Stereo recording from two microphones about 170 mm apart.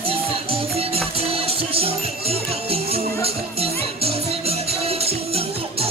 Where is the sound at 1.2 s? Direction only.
35° right (ahead or behind).